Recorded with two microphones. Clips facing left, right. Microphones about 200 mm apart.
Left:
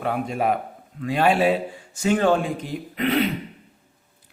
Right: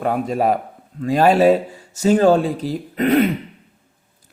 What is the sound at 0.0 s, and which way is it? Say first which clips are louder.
A man's voice: right 5 dB; 40° right (ahead or behind).